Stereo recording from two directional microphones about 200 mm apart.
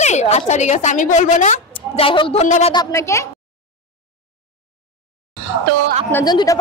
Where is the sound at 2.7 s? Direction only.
15° left (ahead or behind).